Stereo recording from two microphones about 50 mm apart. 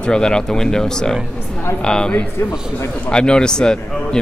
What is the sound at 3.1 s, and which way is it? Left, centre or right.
Speech, centre.